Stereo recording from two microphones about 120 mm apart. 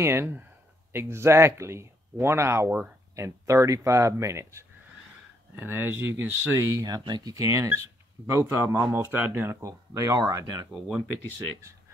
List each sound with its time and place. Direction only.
0.0 s speech: 20° right (ahead or behind)